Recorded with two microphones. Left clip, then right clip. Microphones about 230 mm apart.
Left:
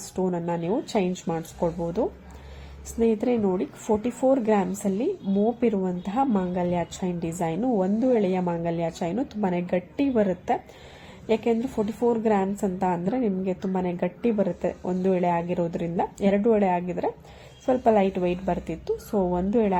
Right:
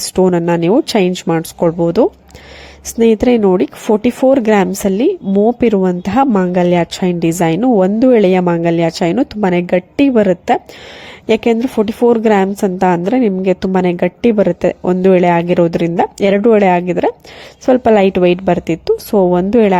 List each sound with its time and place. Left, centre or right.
0.2 s a woman's voice: right